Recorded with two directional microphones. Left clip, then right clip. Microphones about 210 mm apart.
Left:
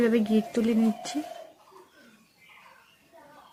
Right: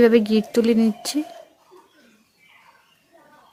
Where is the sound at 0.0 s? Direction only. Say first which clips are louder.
Right 9 dB; 55° right (ahead or behind).